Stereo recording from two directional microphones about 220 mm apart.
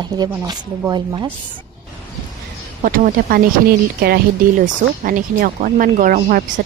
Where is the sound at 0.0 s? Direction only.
20° right (ahead or behind).